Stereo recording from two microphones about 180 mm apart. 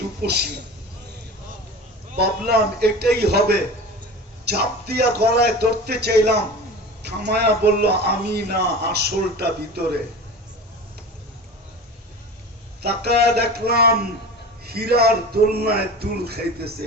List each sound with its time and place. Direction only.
0.2 s a man's voice: 65° right (ahead or behind)
2.5 s a man's voice: 60° right (ahead or behind)
12.8 s a man's voice: 65° right (ahead or behind)